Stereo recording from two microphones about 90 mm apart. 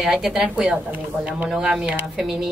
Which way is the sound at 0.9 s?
20° right (ahead or behind).